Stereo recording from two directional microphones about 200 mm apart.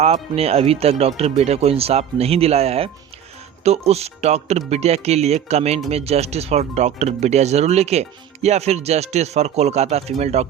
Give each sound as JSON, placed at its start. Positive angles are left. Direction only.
{"t": 0.0, "sound": "speech", "side_deg": -30}